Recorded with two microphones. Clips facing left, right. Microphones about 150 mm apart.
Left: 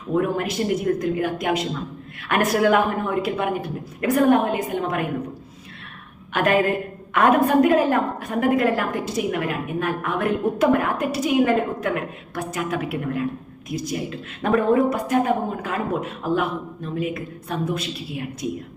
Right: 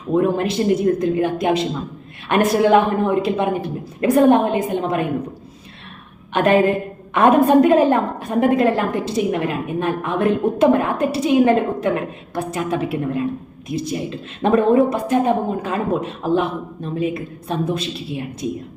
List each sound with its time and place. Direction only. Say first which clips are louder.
0.1 s a woman's voice: right 4 dB; 25° right (ahead or behind)
6.3 s a woman's voice: right 4 dB; 25° right (ahead or behind)